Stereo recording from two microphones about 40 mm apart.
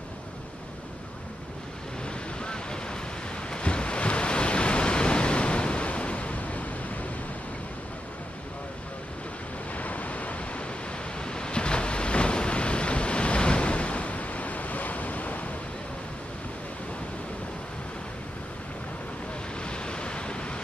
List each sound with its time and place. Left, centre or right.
2.0 s waves: left
9.8 s waves: left
11.1 s waves: left
19.6 s waves: left